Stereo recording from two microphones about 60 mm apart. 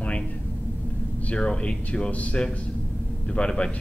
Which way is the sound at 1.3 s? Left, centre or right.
Centre.